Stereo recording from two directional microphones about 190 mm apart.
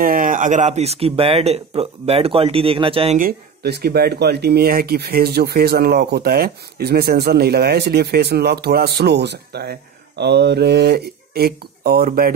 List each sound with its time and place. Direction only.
0.0 s speech: 45° right (ahead or behind); by 3.2 s 30° right (ahead or behind)
3.2 s speech: 55° right (ahead or behind)